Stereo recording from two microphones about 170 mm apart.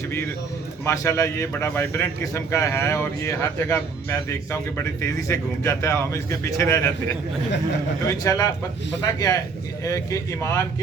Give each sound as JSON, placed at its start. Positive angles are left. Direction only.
{"t": 0.9, "sound": "a man's voice", "side_deg": 15}
{"t": 8.2, "sound": "a man's voice", "side_deg": 20}